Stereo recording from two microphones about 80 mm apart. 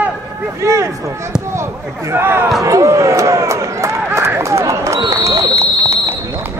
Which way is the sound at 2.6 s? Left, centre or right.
Right.